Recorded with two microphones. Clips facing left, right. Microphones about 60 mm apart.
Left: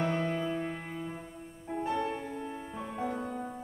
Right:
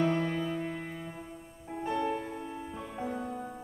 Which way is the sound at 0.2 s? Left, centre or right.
Centre.